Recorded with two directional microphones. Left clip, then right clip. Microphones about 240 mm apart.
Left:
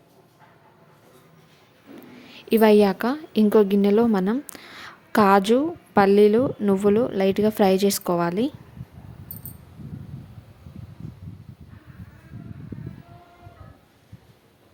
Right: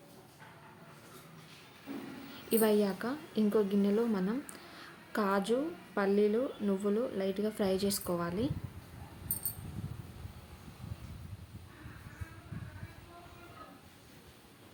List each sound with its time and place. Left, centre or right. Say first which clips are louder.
2.3 s a woman's voice: left 13 dB; left